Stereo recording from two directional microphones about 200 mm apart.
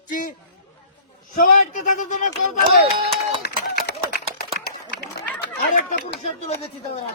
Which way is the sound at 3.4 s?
50° left (ahead or behind).